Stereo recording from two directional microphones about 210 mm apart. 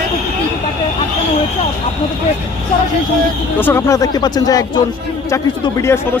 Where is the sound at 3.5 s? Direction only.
10° left (ahead or behind).